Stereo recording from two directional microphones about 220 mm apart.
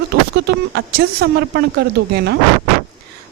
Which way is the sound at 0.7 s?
45° right (ahead or behind).